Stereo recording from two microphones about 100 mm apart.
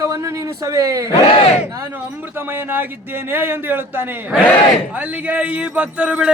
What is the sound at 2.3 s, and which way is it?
A man's voice, 20° right (ahead or behind).